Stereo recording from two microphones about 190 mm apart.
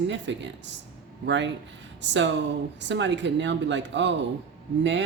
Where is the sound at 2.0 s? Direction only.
70° right (ahead or behind).